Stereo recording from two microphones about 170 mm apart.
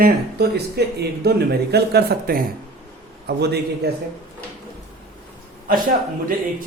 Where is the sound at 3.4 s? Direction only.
75° right (ahead or behind).